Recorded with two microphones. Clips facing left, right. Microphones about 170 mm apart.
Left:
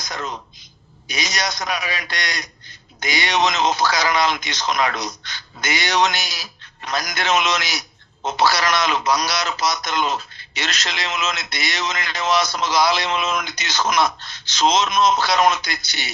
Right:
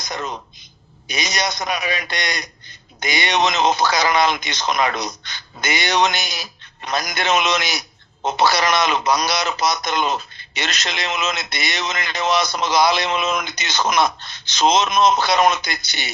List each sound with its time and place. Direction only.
0.0 s a man's voice: 20° right (ahead or behind)